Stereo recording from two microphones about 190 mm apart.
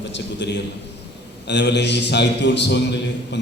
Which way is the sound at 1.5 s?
65° left (ahead or behind).